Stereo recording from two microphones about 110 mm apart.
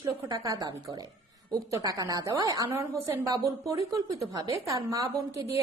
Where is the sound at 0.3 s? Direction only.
35° right (ahead or behind).